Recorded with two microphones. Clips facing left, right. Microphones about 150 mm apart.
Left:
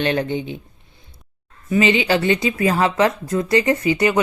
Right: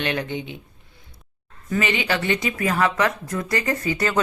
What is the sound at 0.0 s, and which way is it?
Speech, 35° left (ahead or behind).